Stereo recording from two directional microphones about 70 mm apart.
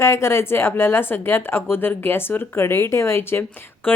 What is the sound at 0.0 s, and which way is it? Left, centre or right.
Speech, left.